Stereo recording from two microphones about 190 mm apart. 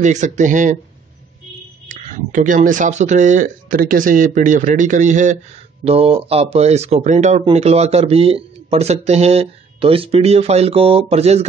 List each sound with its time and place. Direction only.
0.0 s speech: 40° right (ahead or behind)
1.9 s speech: 40° right (ahead or behind)